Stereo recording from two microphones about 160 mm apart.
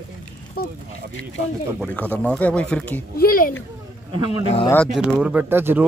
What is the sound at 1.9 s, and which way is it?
Speech, 10° left (ahead or behind).